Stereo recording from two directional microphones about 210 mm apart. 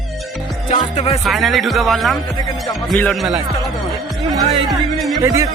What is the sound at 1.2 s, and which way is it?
Speech, centre (ahead or behind).